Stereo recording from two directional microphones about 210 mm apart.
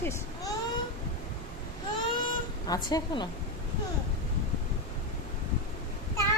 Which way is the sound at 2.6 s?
20° left (ahead or behind).